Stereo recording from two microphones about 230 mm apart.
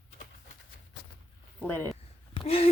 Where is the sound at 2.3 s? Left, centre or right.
Left.